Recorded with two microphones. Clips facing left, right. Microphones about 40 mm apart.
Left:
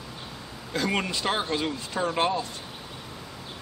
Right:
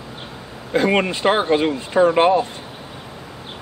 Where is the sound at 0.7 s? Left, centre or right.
Right.